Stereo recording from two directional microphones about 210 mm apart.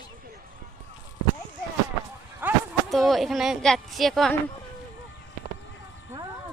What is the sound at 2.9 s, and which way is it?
Speech, centre (ahead or behind).